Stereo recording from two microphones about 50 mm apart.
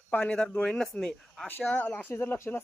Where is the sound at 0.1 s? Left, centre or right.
Left.